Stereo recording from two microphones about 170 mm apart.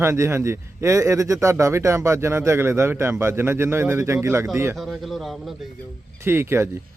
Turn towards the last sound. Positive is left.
turn(degrees=-15)  # may be behind; listen again after turning